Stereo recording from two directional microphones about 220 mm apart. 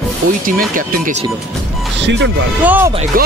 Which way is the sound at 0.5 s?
40° right (ahead or behind).